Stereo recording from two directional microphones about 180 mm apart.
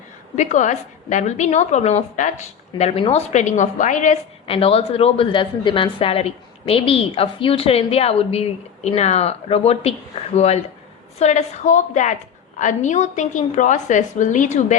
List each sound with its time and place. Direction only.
0.3 s a woman's voice: 40° left (ahead or behind)
4.4 s a woman's voice: 30° left (ahead or behind)